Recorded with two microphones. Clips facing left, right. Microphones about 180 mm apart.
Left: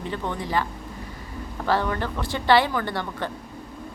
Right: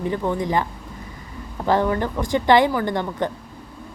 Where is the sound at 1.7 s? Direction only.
15° right (ahead or behind).